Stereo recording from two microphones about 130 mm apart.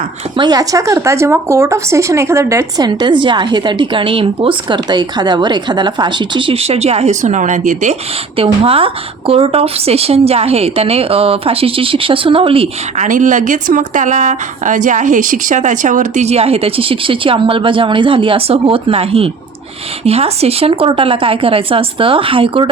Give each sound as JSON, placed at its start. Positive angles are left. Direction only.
{"t": 0.3, "sound": "speech", "side_deg": -30}
{"t": 8.4, "sound": "a woman's voice", "side_deg": -45}
{"t": 13.0, "sound": "a woman's voice", "side_deg": -85}